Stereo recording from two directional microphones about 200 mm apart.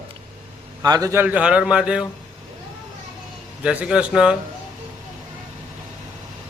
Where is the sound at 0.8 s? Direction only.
20° right (ahead or behind).